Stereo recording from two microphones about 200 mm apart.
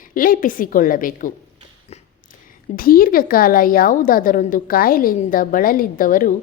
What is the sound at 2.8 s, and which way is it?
A woman's voice, 45° left (ahead or behind).